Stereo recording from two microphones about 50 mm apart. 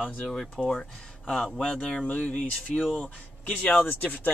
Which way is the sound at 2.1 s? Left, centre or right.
Left.